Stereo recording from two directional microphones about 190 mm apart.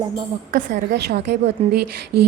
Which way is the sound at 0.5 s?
60° right (ahead or behind).